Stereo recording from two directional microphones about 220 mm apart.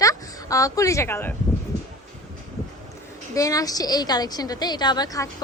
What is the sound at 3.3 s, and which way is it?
A woman's voice, 15° left (ahead or behind).